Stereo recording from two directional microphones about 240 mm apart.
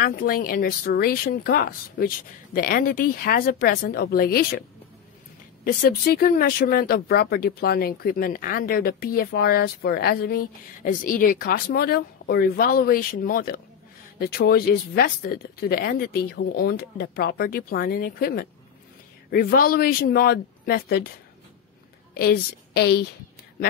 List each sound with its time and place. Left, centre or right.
0.0 s speech: left
22.1 s a woman's voice: left